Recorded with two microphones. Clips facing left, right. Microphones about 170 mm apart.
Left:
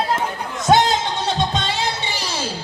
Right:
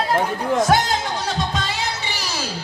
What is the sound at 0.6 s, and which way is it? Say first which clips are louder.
Music: left 7 dB; 25° left (ahead or behind).